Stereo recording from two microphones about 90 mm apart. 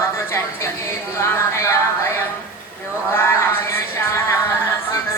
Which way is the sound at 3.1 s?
25° left (ahead or behind).